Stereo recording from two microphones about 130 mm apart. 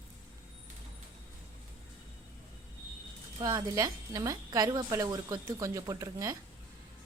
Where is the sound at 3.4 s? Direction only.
25° right (ahead or behind).